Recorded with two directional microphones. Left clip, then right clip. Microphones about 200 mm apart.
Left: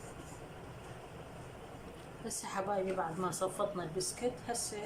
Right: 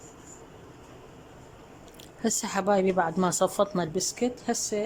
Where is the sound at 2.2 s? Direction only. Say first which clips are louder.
Right 11 dB; 55° right (ahead or behind).